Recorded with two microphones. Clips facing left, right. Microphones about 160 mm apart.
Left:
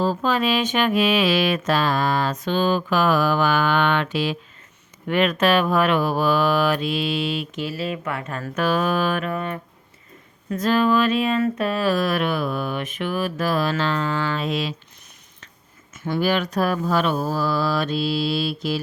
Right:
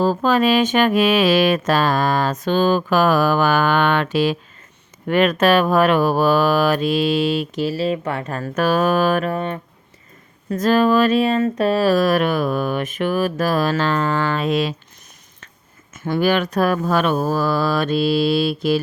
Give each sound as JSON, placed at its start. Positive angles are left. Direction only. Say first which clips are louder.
{"t": 0.0, "sound": "mantra", "louder": "right 5 dB", "side_deg": -45}
{"t": 5.0, "sound": "speech", "louder": "right 4 dB", "side_deg": -45}
{"t": 10.5, "sound": "mantra", "louder": "right 4 dB", "side_deg": -45}
{"t": 15.9, "sound": "speech", "louder": "right 4 dB", "side_deg": -55}